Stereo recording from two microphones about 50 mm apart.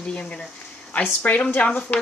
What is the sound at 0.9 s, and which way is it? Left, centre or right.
Speech, left.